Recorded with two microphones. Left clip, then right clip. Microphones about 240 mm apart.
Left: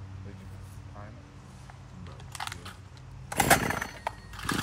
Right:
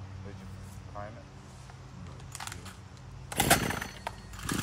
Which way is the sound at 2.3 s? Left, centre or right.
Centre.